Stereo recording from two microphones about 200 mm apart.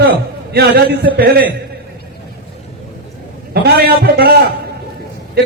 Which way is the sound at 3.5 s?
50° right (ahead or behind).